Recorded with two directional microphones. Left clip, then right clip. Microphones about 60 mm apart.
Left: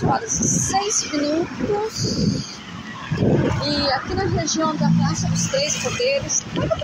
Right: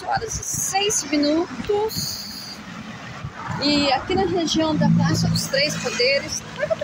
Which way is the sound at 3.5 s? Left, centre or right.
Right.